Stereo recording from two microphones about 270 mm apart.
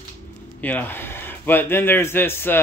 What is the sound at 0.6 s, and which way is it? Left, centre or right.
Speech, centre.